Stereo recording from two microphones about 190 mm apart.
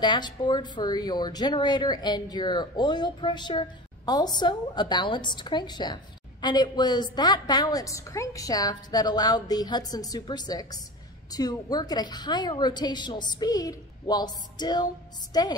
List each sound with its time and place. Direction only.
0.0 s speech: 25° left (ahead or behind)